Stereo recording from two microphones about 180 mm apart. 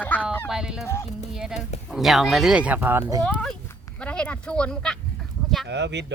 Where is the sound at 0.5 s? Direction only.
5° right (ahead or behind).